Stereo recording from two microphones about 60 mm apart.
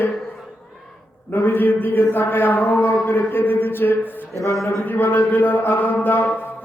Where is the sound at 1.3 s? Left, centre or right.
Left.